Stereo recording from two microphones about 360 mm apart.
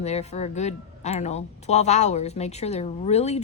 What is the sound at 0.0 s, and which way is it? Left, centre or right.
Speech, centre.